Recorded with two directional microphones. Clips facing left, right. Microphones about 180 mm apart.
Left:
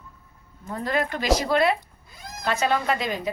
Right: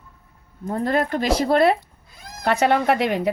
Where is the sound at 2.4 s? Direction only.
65° right (ahead or behind).